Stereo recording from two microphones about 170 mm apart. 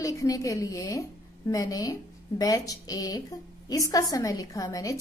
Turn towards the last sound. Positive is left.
turn(degrees=20)  # may be behind; listen again after turning